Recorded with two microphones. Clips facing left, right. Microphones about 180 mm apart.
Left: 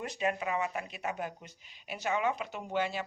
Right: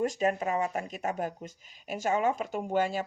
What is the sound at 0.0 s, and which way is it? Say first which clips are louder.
Speech: right 5 dB; 40° right (ahead or behind).